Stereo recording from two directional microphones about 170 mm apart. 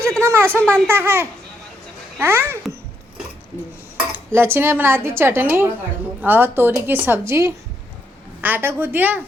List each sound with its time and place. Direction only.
0.2 s a woman's voice: 15° right (ahead or behind)
4.3 s a woman's voice: 15° right (ahead or behind)